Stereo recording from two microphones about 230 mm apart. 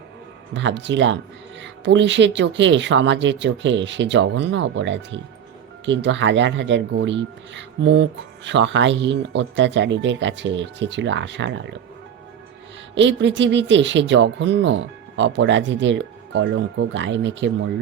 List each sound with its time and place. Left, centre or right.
0.5 s speech: right
12.9 s speech: right